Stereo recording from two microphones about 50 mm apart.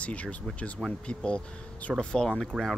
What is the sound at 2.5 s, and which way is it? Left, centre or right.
Speech, centre.